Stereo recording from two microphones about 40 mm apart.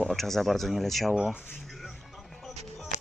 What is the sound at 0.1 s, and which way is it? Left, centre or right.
Speech, centre.